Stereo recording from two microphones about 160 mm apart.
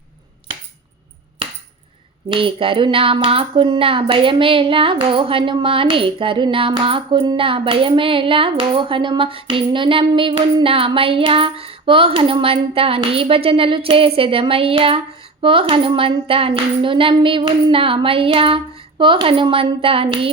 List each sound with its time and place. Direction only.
2.3 s speech: 35° right (ahead or behind)